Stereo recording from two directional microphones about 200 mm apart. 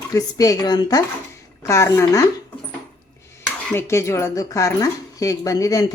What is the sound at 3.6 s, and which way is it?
Speech, 10° left (ahead or behind).